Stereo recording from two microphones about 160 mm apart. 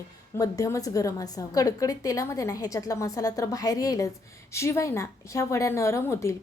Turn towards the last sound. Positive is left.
turn(degrees=15)  # may be behind; listen again after turning